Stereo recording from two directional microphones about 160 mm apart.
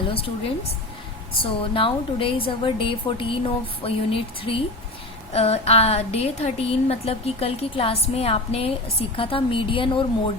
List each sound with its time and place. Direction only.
1.4 s a woman's voice: 35° left (ahead or behind)